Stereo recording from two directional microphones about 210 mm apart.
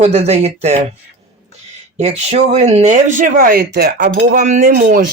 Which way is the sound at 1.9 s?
30° right (ahead or behind).